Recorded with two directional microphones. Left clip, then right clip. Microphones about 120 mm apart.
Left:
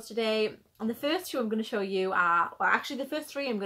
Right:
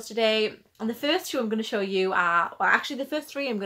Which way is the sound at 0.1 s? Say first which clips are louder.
Right 5 dB; 20° right (ahead or behind).